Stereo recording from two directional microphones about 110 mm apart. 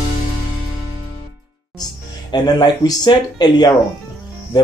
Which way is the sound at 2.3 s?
40° left (ahead or behind).